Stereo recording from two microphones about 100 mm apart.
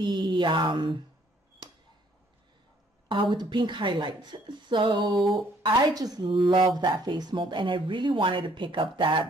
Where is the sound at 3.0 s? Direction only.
55° right (ahead or behind).